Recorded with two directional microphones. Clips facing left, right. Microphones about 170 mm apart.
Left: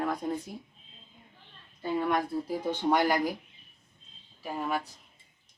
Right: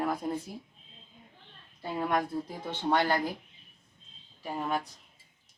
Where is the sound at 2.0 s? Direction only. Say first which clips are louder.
Even; centre (ahead or behind).